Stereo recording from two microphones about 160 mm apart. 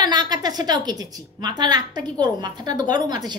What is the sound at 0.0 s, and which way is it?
Speech, 25° right (ahead or behind).